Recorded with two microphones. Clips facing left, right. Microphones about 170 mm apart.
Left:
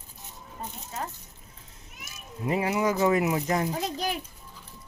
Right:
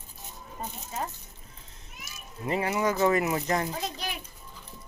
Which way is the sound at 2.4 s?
5° left (ahead or behind).